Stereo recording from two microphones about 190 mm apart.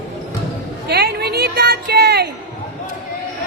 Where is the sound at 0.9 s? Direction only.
60° right (ahead or behind).